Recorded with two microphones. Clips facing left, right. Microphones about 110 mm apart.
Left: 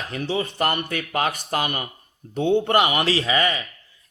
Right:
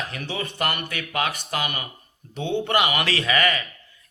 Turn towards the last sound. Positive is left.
turn(degrees=25)  # may be behind; listen again after turning